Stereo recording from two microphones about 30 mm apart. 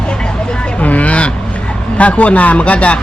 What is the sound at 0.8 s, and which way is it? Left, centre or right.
Vehicle, left.